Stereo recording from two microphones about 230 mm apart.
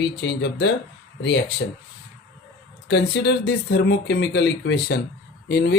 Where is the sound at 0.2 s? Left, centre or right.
Left.